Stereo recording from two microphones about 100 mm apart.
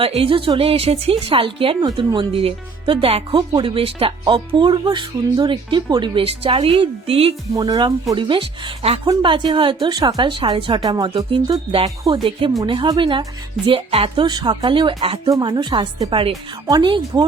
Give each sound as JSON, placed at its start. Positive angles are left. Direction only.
{"t": 0.0, "sound": "a woman's voice", "side_deg": -75}
{"t": 6.2, "sound": "speech", "side_deg": -65}
{"t": 7.5, "sound": "speech", "side_deg": -40}
{"t": 8.1, "sound": "speech", "side_deg": -55}
{"t": 9.0, "sound": "speech", "side_deg": -55}
{"t": 10.8, "sound": "speech", "side_deg": -40}
{"t": 13.7, "sound": "a woman's voice", "side_deg": -70}
{"t": 14.3, "sound": "speech", "side_deg": -45}
{"t": 15.2, "sound": "speech", "side_deg": -40}
{"t": 16.6, "sound": "speech", "side_deg": -45}